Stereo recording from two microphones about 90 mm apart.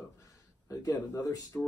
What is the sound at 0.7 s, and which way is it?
Speech, 35° left (ahead or behind).